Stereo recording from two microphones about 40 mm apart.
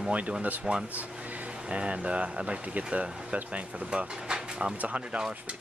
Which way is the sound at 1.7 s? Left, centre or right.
Right.